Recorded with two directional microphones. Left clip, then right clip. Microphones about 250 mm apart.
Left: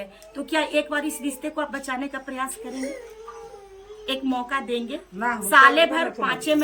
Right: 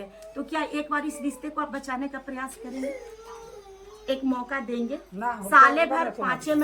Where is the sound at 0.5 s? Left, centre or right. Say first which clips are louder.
Left 5 dB; centre.